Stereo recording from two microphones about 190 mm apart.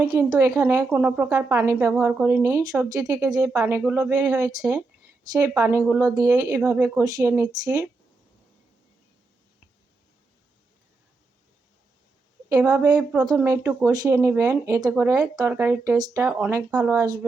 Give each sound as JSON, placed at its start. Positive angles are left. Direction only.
{"t": 0.0, "sound": "a woman's voice", "side_deg": -15}
{"t": 12.5, "sound": "a woman's voice", "side_deg": -20}